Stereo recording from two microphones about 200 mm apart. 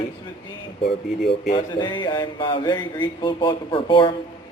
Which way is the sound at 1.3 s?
25° left (ahead or behind).